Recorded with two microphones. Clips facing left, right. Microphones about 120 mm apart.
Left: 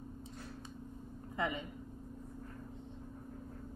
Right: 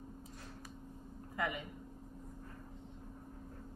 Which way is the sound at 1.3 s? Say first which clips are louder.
Left 2 dB; 25° left (ahead or behind).